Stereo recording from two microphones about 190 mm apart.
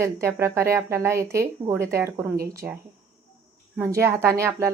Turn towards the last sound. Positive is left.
turn(degrees=-15)  # may be behind; listen again after turning